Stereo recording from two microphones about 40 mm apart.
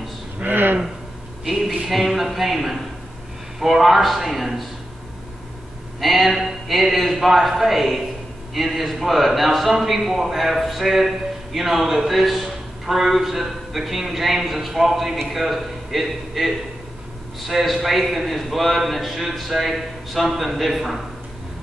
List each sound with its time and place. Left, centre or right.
0.4 s a sound: right
1.5 s a man's voice: centre
5.9 s a man's voice: centre